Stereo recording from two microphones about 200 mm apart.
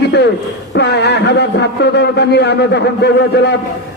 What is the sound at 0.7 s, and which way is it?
A man's voice, 60° left (ahead or behind).